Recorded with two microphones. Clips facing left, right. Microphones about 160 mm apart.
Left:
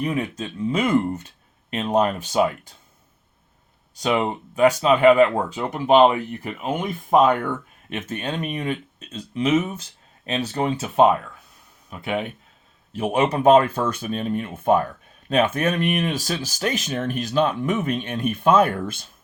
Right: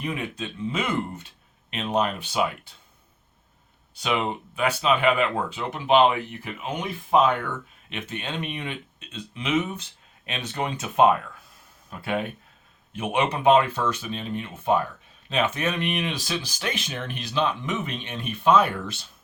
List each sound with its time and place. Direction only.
0.0 s speech: 40° left (ahead or behind)
4.0 s speech: 40° left (ahead or behind)
11.9 s speech: 20° left (ahead or behind)
12.9 s speech: 35° left (ahead or behind)